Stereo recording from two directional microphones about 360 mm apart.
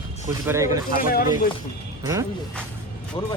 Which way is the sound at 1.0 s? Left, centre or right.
Left.